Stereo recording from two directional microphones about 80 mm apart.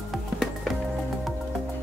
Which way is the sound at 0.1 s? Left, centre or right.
Centre.